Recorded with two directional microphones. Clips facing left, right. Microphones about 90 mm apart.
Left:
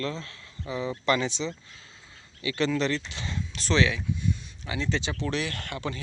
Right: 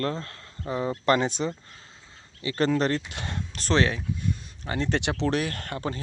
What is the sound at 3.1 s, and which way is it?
Speech, 55° right (ahead or behind).